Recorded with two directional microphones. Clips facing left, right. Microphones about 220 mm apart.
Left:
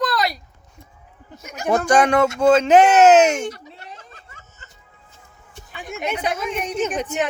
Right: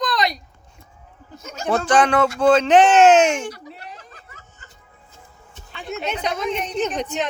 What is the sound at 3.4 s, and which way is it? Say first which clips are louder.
Snicker: left 2 dB; 25° left (ahead or behind).